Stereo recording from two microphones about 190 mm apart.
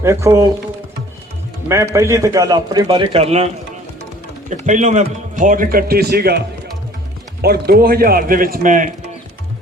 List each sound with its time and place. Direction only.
0.0 s speech: 15° right (ahead or behind)
1.6 s a man's voice: 15° right (ahead or behind); by 6.4 s 55° right (ahead or behind)
7.4 s a man's voice: 55° right (ahead or behind)